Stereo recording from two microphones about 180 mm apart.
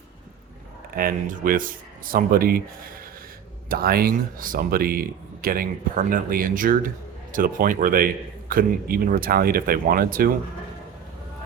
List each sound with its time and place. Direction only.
0.9 s a man's voice: 50° right (ahead or behind)
3.7 s a man's voice: 60° right (ahead or behind)